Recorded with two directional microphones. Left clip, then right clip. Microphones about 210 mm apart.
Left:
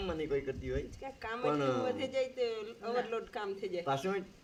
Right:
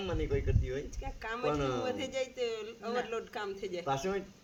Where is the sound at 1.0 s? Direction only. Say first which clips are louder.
Right 1 dB; 10° right (ahead or behind).